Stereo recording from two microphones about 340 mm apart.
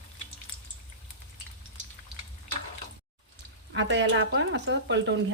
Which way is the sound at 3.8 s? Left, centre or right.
Right.